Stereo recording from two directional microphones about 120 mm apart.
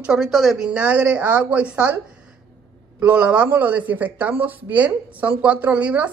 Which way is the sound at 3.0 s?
10° right (ahead or behind).